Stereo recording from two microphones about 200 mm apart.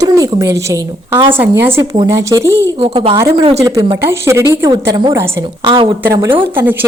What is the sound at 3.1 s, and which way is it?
A woman's voice, 15° right (ahead or behind).